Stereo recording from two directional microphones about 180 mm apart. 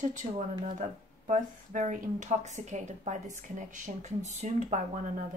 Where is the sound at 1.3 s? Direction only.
45° right (ahead or behind).